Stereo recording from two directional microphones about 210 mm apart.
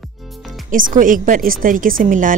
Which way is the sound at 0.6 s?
40° right (ahead or behind).